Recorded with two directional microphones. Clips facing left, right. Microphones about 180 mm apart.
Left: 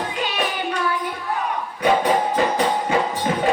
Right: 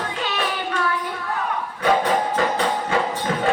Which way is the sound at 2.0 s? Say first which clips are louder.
Left 2 dB; 15° left (ahead or behind).